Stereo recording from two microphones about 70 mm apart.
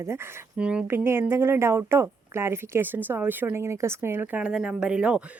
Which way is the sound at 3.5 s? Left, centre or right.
Right.